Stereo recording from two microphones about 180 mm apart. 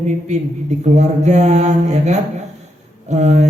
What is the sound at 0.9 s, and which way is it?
Mantra, 40° right (ahead or behind).